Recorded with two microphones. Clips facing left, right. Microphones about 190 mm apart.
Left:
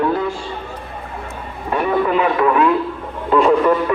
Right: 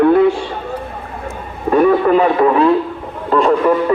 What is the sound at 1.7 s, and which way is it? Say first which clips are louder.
Speech: right 6 dB; 40° right (ahead or behind).